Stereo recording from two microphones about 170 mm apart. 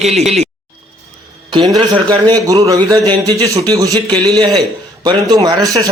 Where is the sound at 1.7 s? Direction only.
25° right (ahead or behind).